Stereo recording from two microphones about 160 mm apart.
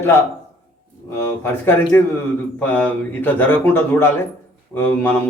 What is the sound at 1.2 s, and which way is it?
A man's voice, 15° left (ahead or behind).